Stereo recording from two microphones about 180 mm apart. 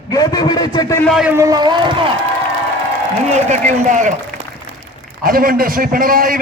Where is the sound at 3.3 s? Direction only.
40° right (ahead or behind).